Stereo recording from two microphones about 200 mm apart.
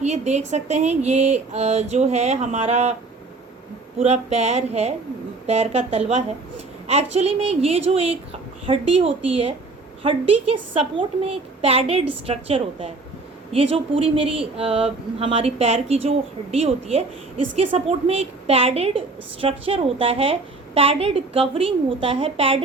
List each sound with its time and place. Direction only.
0.0 s speech: 35° right (ahead or behind)
3.9 s a woman's voice: 30° right (ahead or behind)